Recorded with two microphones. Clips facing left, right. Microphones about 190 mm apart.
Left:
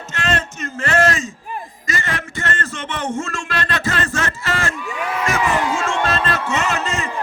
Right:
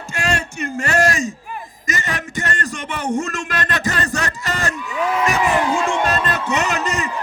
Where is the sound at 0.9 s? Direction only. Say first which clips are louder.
Left 1 dB; 15° right (ahead or behind).